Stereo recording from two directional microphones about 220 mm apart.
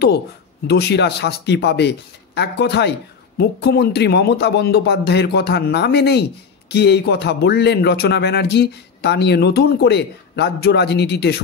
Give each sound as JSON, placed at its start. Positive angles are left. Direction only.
{"t": 0.7, "sound": "speech", "side_deg": 50}